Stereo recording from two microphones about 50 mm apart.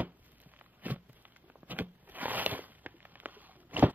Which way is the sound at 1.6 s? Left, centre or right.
Right.